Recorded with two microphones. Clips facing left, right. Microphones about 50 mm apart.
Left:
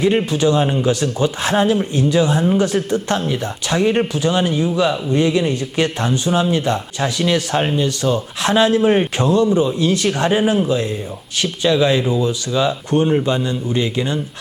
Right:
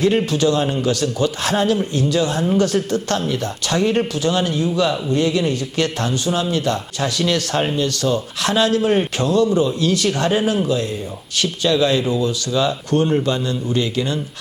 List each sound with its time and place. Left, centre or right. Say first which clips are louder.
0.0 s a man's voice: left 1 dB; centre